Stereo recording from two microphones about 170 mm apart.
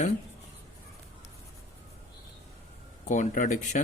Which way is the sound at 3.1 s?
50° left (ahead or behind).